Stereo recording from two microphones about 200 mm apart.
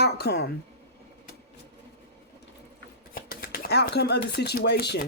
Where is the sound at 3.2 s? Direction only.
50° left (ahead or behind).